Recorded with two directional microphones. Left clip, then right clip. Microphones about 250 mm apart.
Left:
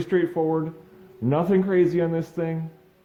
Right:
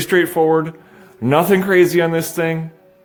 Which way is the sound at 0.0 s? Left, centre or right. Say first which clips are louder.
Right 8 dB; right.